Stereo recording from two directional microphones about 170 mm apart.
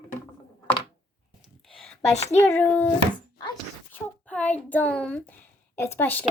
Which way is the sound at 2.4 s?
10° left (ahead or behind).